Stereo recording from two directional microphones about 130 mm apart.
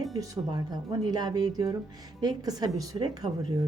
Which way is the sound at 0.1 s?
30° right (ahead or behind).